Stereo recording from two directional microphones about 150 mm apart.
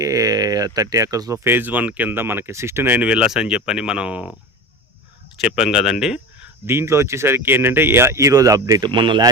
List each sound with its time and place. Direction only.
0.0 s speech: 25° right (ahead or behind)
5.4 s speech: 5° right (ahead or behind); by 9.3 s 30° right (ahead or behind)